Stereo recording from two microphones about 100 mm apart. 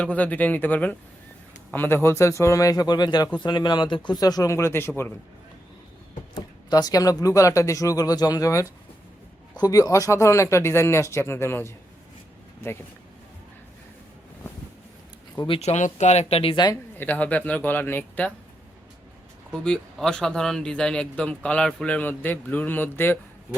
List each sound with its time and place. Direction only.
0.0 s speech: 15° left (ahead or behind); by 4.5 s 40° left (ahead or behind)
4.5 s speech: 25° left (ahead or behind)
6.3 s speech: 45° left (ahead or behind); by 12.8 s 25° left (ahead or behind)
15.4 s speech: 65° left (ahead or behind)
16.1 s speech: 80° left
17.0 s speech: 15° left (ahead or behind)
19.5 s speech: 5° left (ahead or behind)